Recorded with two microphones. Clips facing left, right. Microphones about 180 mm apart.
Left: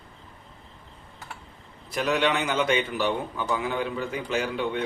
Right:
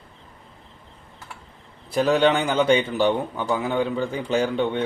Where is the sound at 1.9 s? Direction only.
30° right (ahead or behind).